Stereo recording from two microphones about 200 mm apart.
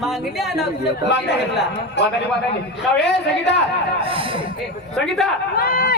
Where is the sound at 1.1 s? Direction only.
55° left (ahead or behind).